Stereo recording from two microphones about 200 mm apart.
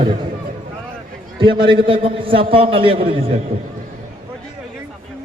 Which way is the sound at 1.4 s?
25° right (ahead or behind).